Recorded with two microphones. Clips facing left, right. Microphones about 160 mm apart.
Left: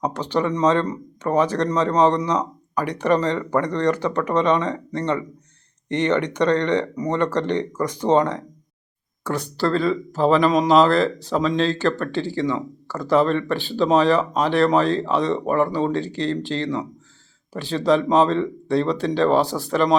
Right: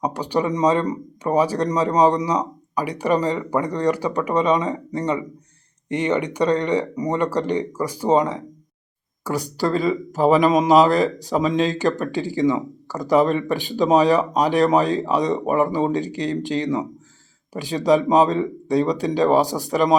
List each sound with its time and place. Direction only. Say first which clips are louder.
0.0 s speech: even; 10° right (ahead or behind)